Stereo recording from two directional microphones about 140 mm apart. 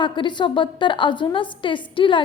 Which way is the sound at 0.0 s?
35° left (ahead or behind).